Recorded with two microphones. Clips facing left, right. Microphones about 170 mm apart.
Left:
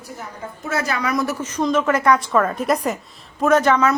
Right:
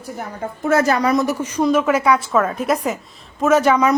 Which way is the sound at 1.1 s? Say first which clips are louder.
Right 4 dB; 20° right (ahead or behind).